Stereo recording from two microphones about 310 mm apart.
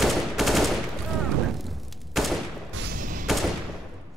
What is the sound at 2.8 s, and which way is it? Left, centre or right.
Music, right.